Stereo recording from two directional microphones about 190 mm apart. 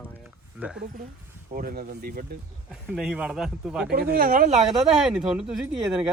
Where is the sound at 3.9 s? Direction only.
55° right (ahead or behind).